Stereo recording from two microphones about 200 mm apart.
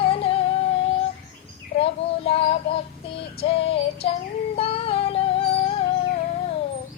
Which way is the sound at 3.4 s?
30° left (ahead or behind).